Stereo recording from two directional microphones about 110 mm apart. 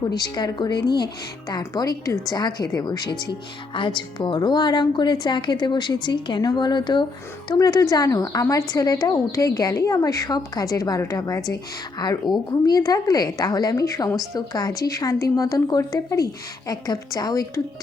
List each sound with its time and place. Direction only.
0.1 s a woman's voice: 40° left (ahead or behind)